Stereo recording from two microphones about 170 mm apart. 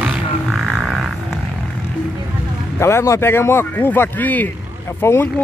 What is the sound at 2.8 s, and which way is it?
Speech, 15° left (ahead or behind).